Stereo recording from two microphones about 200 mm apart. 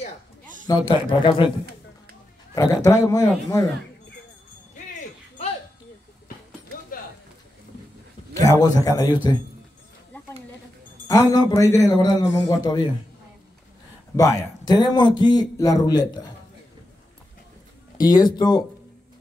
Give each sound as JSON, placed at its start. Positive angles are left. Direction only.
{"t": 0.7, "sound": "a man's voice", "side_deg": 25}
{"t": 2.5, "sound": "a man's voice", "side_deg": 15}
{"t": 8.4, "sound": "a man's voice", "side_deg": 15}
{"t": 11.1, "sound": "a man's voice", "side_deg": 15}
{"t": 14.1, "sound": "a man's voice", "side_deg": 20}
{"t": 17.9, "sound": "a man's voice", "side_deg": 20}